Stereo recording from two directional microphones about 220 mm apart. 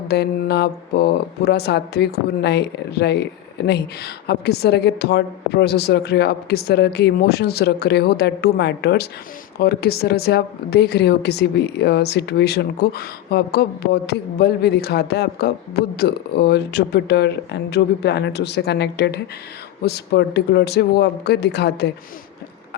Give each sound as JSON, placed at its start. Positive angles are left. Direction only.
{"t": 0.1, "sound": "speech", "side_deg": 50}